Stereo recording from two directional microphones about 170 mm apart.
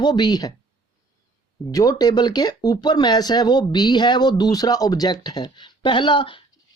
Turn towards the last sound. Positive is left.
turn(degrees=30)  # may be behind; listen again after turning